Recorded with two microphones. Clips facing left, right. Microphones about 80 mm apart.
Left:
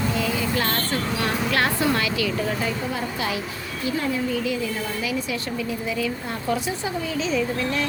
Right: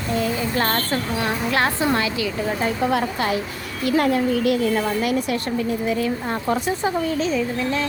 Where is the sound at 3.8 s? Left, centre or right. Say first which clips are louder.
Right 6 dB; right.